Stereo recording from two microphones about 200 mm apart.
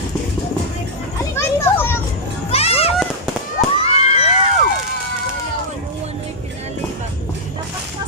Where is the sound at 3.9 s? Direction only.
30° left (ahead or behind).